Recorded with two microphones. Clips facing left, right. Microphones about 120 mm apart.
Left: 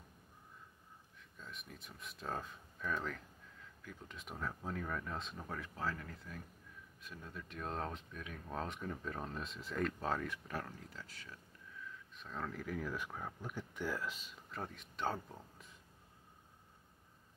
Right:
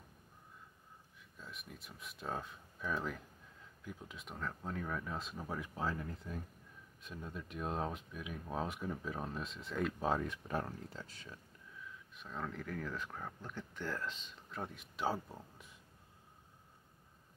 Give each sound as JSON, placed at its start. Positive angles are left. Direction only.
{"t": 1.4, "sound": "speech", "side_deg": 0}
{"t": 4.1, "sound": "speech", "side_deg": 0}
{"t": 5.6, "sound": "speech", "side_deg": -20}
{"t": 9.9, "sound": "speech", "side_deg": -15}
{"t": 12.2, "sound": "speech", "side_deg": 0}